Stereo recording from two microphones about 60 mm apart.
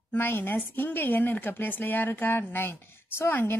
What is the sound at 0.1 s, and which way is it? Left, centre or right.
A woman's voice, left.